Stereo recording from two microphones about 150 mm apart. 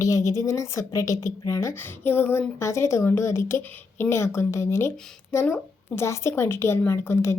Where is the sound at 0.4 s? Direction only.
20° left (ahead or behind).